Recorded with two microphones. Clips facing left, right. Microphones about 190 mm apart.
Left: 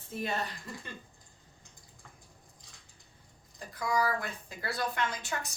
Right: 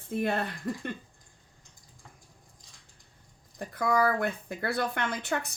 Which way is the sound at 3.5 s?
60° right (ahead or behind).